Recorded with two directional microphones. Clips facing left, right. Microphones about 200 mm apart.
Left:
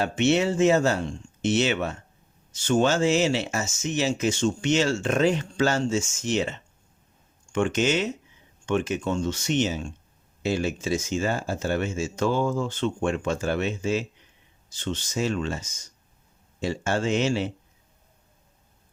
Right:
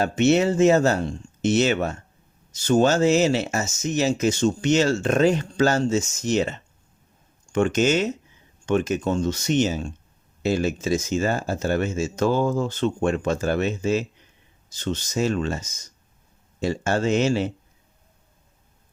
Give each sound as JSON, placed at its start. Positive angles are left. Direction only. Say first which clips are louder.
{"t": 0.0, "sound": "speech", "louder": "right 3 dB", "side_deg": -40}